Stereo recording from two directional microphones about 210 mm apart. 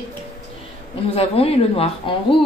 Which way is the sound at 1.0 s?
25° left (ahead or behind).